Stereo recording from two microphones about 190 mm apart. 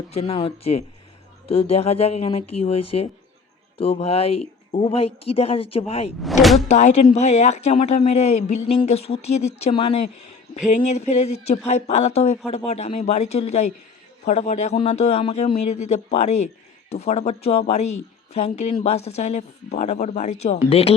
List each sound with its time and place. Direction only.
0.1 s speech: 30° left (ahead or behind)
6.2 s speech: centre (ahead or behind)
6.7 s speech: 35° left (ahead or behind)